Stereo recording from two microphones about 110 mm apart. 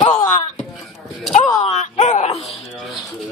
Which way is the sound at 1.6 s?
90° left.